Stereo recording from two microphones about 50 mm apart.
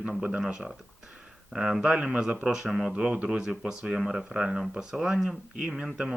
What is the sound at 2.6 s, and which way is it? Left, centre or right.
Speech, centre.